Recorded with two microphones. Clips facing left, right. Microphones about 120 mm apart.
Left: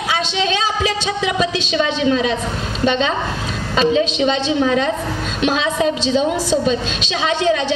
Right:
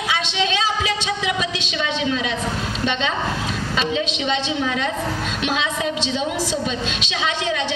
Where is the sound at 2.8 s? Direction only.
35° left (ahead or behind).